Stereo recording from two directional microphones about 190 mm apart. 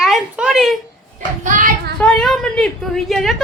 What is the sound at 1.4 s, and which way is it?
Speech, 45° right (ahead or behind).